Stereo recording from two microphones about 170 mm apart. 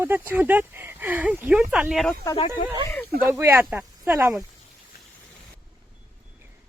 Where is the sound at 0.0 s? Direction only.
10° right (ahead or behind).